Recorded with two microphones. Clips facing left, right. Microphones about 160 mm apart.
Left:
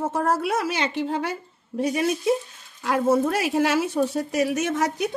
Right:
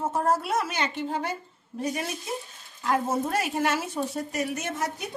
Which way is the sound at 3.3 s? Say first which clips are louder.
Left 4 dB; 85° left.